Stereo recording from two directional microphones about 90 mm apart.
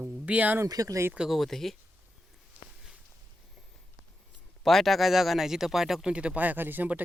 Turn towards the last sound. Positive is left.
turn(degrees=-20)  # may be behind; listen again after turning